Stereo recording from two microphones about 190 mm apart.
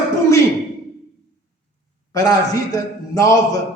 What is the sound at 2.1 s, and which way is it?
A man's voice, 20° left (ahead or behind).